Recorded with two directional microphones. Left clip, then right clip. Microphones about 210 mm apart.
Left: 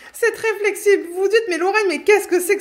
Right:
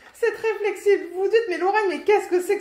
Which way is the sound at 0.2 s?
50° left (ahead or behind).